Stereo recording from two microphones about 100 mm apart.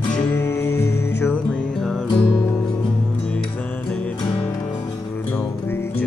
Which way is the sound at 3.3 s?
15° left (ahead or behind).